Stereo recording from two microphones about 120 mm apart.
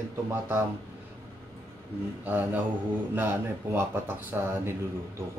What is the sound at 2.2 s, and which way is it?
Speech, 15° right (ahead or behind).